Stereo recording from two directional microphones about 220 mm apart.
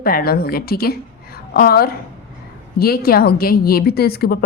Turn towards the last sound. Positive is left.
turn(degrees=45)  # may be behind; listen again after turning